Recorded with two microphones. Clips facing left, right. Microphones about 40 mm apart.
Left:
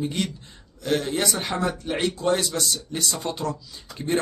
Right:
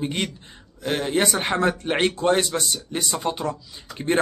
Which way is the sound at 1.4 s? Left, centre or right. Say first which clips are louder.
Right 4 dB; right.